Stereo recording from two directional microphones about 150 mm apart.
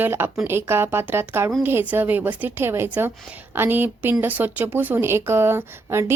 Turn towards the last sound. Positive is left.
turn(degrees=-15)  # may be behind; listen again after turning